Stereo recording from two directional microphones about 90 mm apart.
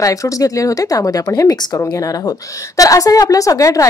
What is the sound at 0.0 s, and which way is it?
Speech, 40° left (ahead or behind).